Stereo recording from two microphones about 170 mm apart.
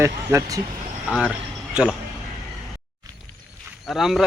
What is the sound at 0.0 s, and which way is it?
Speech, 15° right (ahead or behind).